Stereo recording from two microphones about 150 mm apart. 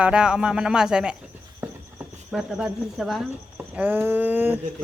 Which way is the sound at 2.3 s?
5° right (ahead or behind).